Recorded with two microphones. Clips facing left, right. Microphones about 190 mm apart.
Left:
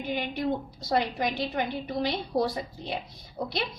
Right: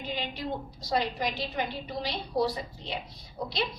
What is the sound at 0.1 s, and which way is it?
A woman's voice, 55° left (ahead or behind).